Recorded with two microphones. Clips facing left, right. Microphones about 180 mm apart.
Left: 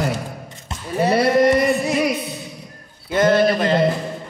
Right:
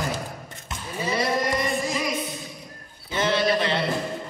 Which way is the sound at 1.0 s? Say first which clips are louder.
Left 10 dB; 65° left (ahead or behind).